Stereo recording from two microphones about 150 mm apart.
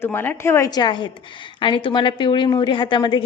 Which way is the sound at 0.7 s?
30° left (ahead or behind).